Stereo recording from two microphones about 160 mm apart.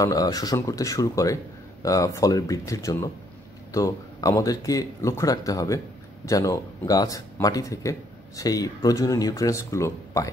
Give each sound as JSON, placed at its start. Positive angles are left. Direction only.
{"t": 0.0, "sound": "speech", "side_deg": 20}